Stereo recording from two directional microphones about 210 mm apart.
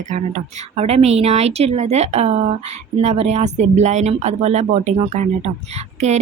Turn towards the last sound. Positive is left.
turn(degrees=-35)  # may be behind; listen again after turning